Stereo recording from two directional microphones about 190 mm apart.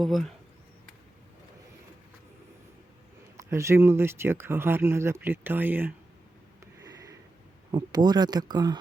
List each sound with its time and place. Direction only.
0.0 s speech: centre (ahead or behind)
3.3 s speech: 15° right (ahead or behind)
7.7 s speech: 20° right (ahead or behind)